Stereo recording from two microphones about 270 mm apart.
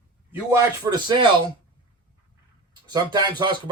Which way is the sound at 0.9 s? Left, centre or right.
Centre.